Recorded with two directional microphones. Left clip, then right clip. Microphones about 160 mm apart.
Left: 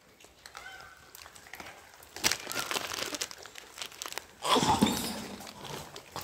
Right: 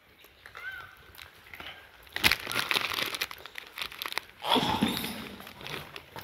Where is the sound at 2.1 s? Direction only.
30° right (ahead or behind).